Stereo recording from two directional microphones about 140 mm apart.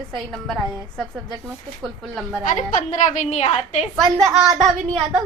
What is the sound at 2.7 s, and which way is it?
A woman's voice, 60° left (ahead or behind).